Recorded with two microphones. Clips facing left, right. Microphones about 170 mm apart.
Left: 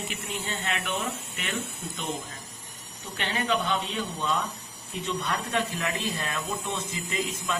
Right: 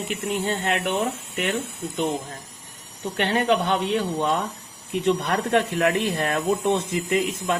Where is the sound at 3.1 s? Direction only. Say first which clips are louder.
Right 7 dB; 60° right (ahead or behind).